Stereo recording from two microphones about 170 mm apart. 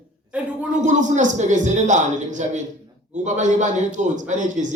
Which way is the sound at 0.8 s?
45° right (ahead or behind).